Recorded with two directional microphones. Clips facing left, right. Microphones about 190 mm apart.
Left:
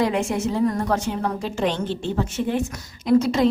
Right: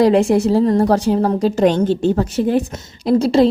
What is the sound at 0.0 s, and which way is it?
A woman's voice, 35° right (ahead or behind).